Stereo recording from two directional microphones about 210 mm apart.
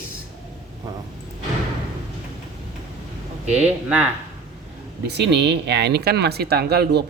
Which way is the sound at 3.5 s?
30° right (ahead or behind).